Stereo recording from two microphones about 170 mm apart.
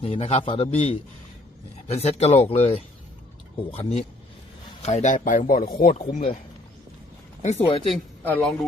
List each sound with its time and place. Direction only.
0.0 s a man's voice: 35° left (ahead or behind)
3.7 s a man's voice: 35° left (ahead or behind)
7.4 s a man's voice: 35° left (ahead or behind)
7.9 s speech: 5° left (ahead or behind)